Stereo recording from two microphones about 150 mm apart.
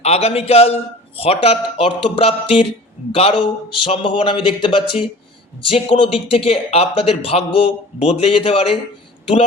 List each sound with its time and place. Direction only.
0.0 s a man's voice: 45° left (ahead or behind)